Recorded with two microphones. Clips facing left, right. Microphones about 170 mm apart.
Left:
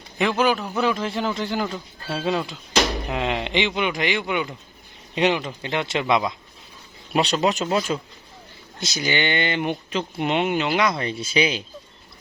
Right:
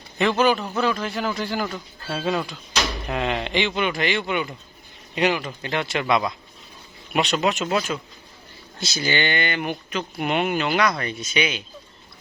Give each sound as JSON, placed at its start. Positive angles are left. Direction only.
{"t": 0.2, "sound": "a man's voice", "side_deg": 10}
{"t": 7.1, "sound": "speech", "side_deg": 30}
{"t": 8.8, "sound": "a man's voice", "side_deg": 20}